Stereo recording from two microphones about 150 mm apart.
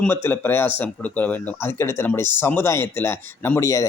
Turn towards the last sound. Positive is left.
turn(degrees=20)  # may be behind; listen again after turning